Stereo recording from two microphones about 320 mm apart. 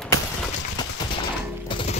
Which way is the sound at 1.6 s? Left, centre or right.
Centre.